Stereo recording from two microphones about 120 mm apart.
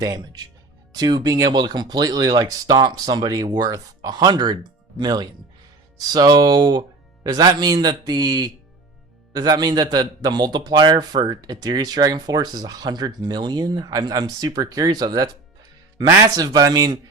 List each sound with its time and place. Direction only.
0.0 s a man's voice: 30° right (ahead or behind)